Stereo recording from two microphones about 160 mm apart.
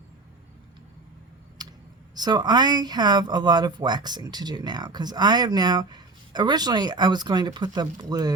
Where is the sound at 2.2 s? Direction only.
25° right (ahead or behind).